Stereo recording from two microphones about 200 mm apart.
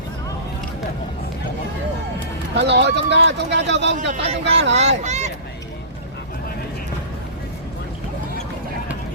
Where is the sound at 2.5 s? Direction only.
60° right (ahead or behind).